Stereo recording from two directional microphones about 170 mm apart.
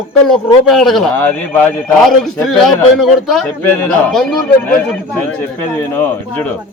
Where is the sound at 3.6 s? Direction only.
10° left (ahead or behind).